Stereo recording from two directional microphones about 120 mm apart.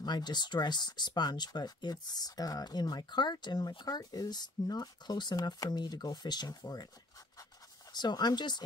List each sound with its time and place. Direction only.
0.0 s speech: 35° left (ahead or behind)
7.9 s speech: 35° left (ahead or behind)